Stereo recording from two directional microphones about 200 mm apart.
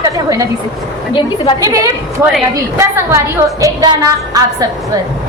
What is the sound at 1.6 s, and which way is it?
Speech, 15° right (ahead or behind).